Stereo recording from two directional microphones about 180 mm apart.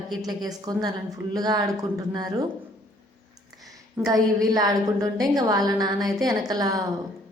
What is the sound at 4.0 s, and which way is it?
Speech, 5° right (ahead or behind).